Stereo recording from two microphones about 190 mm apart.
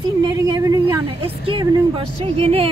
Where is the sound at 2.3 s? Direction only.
35° right (ahead or behind).